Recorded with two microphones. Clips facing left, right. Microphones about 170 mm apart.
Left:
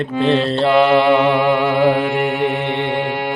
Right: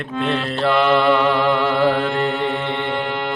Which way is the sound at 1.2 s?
15° left (ahead or behind).